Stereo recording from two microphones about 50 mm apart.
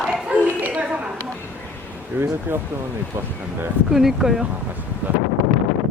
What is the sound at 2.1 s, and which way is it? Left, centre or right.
Speech, right.